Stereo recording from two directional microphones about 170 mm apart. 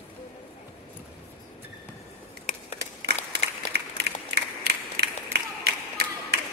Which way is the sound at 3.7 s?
75° right (ahead or behind).